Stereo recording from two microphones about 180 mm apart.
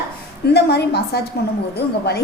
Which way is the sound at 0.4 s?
65° left (ahead or behind).